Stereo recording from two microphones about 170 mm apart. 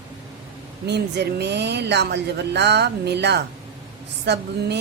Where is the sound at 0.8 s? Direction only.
80° right.